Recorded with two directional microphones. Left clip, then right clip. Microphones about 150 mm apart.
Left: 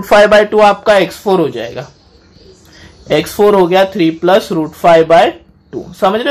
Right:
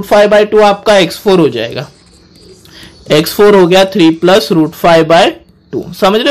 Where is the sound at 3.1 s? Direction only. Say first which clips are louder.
Right 3 dB; 30° right (ahead or behind).